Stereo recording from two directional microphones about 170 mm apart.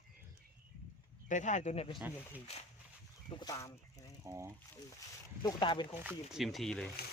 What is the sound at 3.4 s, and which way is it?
Speech, 20° left (ahead or behind).